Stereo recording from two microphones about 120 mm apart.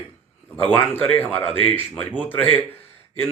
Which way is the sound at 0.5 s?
15° left (ahead or behind).